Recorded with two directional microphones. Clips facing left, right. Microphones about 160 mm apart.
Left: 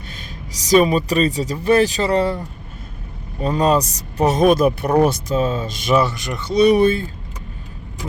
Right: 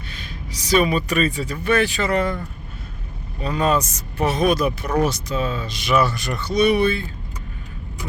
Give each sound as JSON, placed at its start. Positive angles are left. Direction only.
{"t": 0.6, "sound": "speech", "side_deg": 40}
{"t": 3.4, "sound": "speech", "side_deg": 40}
{"t": 5.9, "sound": "speech", "side_deg": 25}
{"t": 6.5, "sound": "speech", "side_deg": 35}